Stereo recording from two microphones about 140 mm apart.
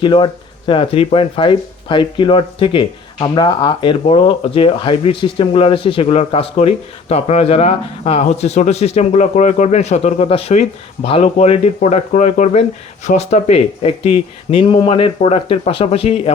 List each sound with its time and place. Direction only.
0.0 s speech: 35° left (ahead or behind)